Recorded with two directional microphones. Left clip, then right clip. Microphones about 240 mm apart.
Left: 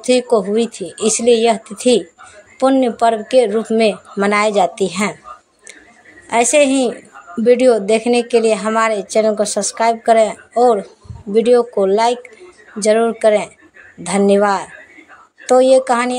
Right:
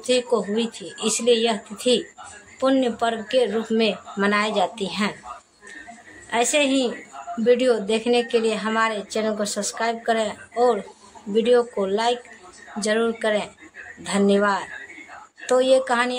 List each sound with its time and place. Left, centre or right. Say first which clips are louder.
0.0 s speech: left 7 dB; left
6.3 s speech: left 8 dB; left